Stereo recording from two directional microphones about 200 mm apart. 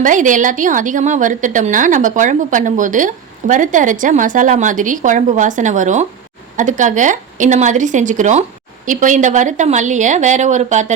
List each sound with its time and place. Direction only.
0.0 s a woman's voice: 40° right (ahead or behind)